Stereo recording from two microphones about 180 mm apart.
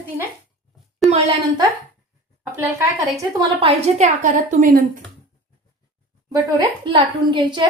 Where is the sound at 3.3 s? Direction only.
30° right (ahead or behind).